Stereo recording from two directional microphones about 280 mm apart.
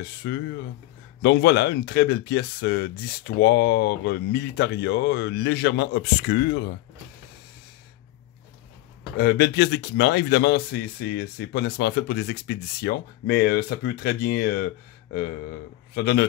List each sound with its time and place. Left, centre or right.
0.0 s speech: left
9.1 s speech: left
15.9 s speech: left